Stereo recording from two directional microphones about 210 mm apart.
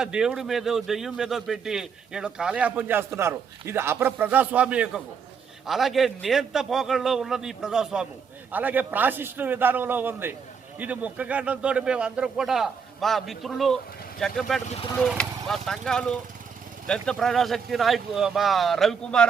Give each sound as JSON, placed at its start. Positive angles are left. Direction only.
{"t": 0.0, "sound": "a man's voice", "side_deg": -5}
{"t": 14.7, "sound": "speech", "side_deg": 25}
{"t": 14.9, "sound": "speech", "side_deg": 5}